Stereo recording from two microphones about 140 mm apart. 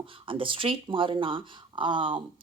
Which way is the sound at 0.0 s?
40° right (ahead or behind).